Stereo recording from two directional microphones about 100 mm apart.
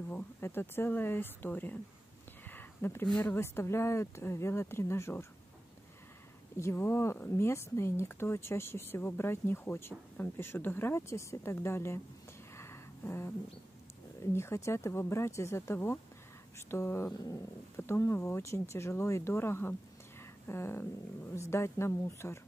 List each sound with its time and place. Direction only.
0.1 s speech: 20° left (ahead or behind)
2.4 s a sound: 20° left (ahead or behind)
3.2 s speech: 25° left (ahead or behind)
6.5 s speech: 25° left (ahead or behind)
12.5 s a sound: 25° left (ahead or behind)
14.2 s speech: 25° left (ahead or behind)
17.1 s speech: 35° left (ahead or behind)
20.2 s a sound: 25° left (ahead or behind)
21.4 s speech: 25° left (ahead or behind)